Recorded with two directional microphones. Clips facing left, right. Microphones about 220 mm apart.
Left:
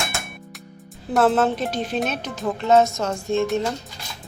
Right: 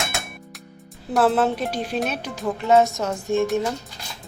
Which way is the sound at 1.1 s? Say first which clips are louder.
Left 1 dB; 5° right (ahead or behind).